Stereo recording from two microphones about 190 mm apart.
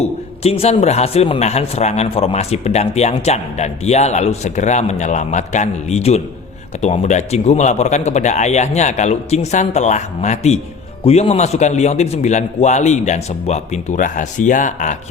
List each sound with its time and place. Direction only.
0.0 s a man's voice: 35° left (ahead or behind)